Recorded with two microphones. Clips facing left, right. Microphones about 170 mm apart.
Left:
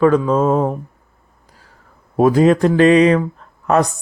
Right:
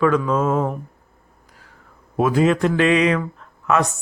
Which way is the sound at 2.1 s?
40° left (ahead or behind).